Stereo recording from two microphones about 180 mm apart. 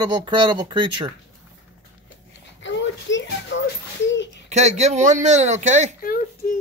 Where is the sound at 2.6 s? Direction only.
90° left.